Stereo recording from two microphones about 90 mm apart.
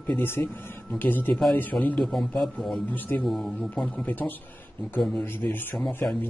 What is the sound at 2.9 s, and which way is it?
Speech, 20° left (ahead or behind).